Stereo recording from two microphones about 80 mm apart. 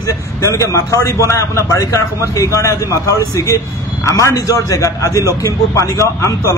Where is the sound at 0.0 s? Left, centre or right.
Left.